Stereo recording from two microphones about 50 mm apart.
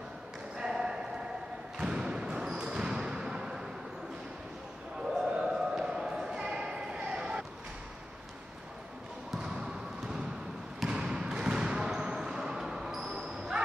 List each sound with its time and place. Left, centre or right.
0.6 s a sound: centre
1.8 s basketball bounce: centre
5.3 s basketball bounce: centre
10.9 s basketball bounce: centre